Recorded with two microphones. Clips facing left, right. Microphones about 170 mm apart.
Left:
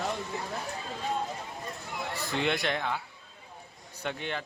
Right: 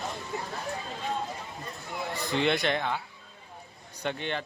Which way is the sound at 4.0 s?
5° left (ahead or behind).